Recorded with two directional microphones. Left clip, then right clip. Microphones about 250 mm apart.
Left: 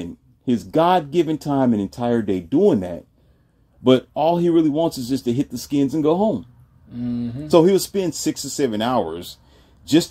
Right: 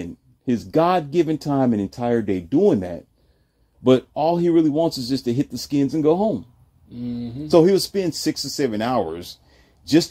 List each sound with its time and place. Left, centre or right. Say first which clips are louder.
0.0 s speech: left 1 dB; centre
7.5 s speech: even; centre